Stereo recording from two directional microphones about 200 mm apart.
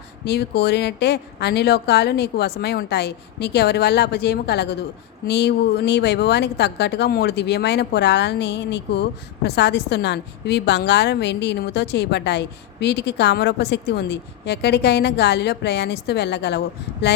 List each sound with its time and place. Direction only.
0.3 s a woman's voice: 55° left (ahead or behind)